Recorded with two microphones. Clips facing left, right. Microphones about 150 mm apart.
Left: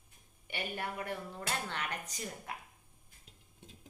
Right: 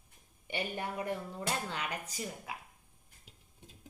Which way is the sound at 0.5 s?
20° right (ahead or behind).